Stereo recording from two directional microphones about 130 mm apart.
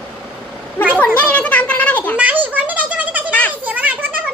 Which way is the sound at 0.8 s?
15° left (ahead or behind).